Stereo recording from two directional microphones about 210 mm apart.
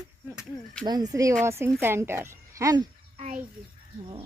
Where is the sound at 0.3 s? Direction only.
5° left (ahead or behind).